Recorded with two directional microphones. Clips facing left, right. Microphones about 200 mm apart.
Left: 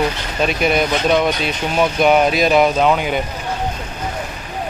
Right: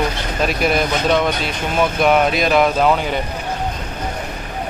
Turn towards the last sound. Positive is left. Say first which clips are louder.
# left 1 dB
turn(degrees=0)  # may be behind; listen again after turning